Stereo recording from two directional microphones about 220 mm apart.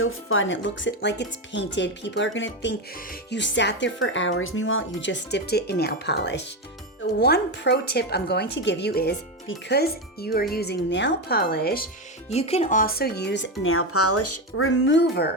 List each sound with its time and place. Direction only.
0.0 s a woman's voice: 65° left (ahead or behind)
4.9 s a woman's voice: 50° left (ahead or behind)
12.3 s a woman's voice: 30° left (ahead or behind); by 15.3 s 50° left (ahead or behind)